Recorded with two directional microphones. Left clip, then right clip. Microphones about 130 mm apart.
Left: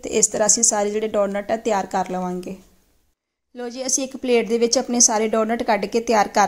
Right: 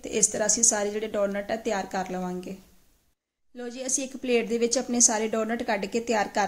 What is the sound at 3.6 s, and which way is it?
A woman's voice, 25° left (ahead or behind).